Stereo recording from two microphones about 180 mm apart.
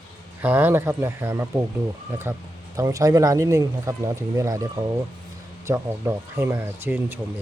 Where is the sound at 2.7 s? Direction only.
20° right (ahead or behind).